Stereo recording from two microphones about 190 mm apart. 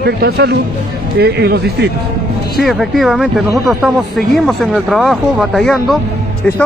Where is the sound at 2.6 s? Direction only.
Centre (ahead or behind).